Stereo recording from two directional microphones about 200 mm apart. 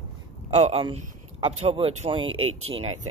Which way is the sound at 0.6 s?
30° right (ahead or behind).